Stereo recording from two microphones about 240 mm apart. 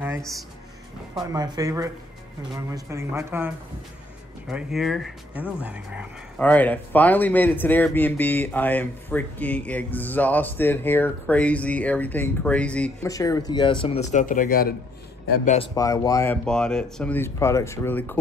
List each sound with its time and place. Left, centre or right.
1.2 s speech: centre
6.4 s speech: centre; by 14.8 s left
15.2 s a man's voice: left
15.7 s speech: centre